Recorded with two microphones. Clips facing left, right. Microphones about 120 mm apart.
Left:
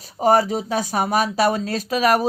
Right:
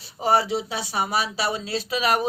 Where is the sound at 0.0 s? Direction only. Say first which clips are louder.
Left 5 dB; 45° left (ahead or behind).